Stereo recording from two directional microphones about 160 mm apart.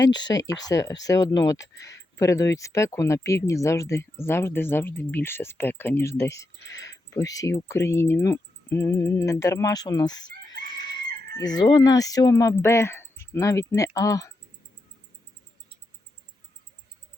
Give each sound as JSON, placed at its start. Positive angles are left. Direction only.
{"t": 0.3, "sound": "speech", "side_deg": 25}